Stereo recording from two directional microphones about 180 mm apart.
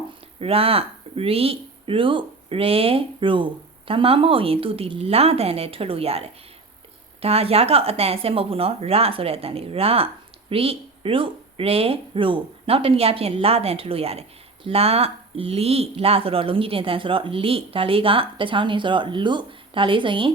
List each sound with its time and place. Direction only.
0.3 s speech: 30° right (ahead or behind)